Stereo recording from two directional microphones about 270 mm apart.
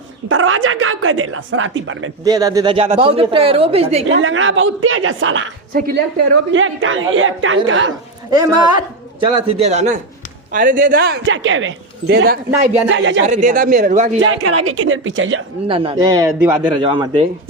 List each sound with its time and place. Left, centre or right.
0.3 s a woman's voice: right
2.2 s speech: centre
4.1 s a woman's voice: right
5.7 s a woman's voice: right
6.5 s a woman's voice: right
8.3 s a man's voice: centre; by 13.2 s right
13.2 s speech: right
14.3 s a woman's voice: right
15.6 s a man's voice: centre
16.7 s a man's voice: centre